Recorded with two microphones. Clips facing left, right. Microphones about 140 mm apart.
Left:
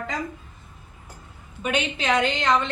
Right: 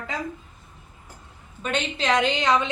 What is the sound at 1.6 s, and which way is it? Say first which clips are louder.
A woman's voice: left 1 dB; 5° left (ahead or behind).